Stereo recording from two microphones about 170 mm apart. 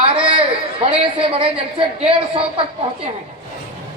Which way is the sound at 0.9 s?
35° right (ahead or behind).